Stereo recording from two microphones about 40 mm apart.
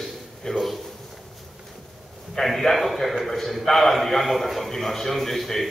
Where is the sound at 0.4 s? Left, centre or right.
Centre.